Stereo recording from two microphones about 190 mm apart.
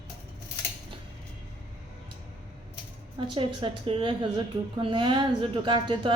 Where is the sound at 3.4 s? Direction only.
25° right (ahead or behind).